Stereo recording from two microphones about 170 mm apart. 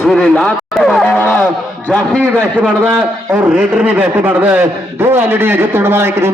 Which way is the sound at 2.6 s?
10° right (ahead or behind).